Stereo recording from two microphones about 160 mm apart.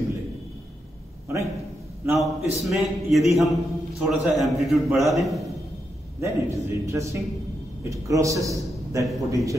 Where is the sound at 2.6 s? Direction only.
Centre (ahead or behind).